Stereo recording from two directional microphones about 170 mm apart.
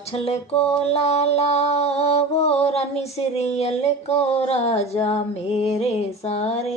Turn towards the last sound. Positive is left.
turn(degrees=35)  # may be behind; listen again after turning